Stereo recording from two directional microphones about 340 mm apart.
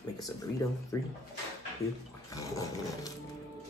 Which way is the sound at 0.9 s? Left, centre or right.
Centre.